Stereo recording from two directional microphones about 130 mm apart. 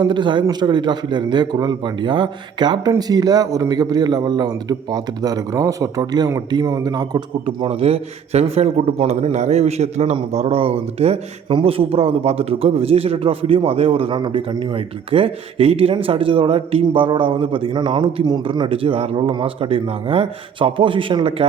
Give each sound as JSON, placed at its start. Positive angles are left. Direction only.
{"t": 0.0, "sound": "a man's voice", "side_deg": -35}